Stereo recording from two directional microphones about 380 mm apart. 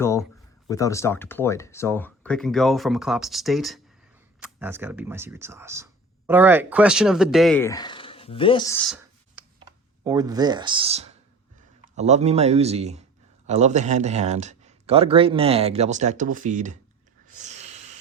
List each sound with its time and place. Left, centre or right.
0.0 s speech: centre
9.6 s speech: centre
17.2 s a sound: centre